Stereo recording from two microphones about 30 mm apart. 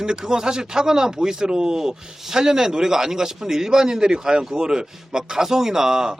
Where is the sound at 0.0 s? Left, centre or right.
Right.